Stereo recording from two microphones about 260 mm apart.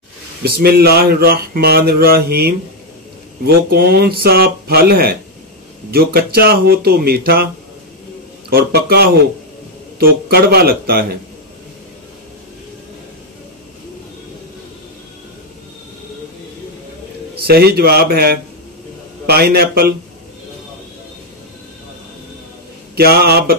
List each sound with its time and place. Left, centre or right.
0.4 s speech: right
8.5 s speech: right
17.4 s speech: right
22.9 s speech: right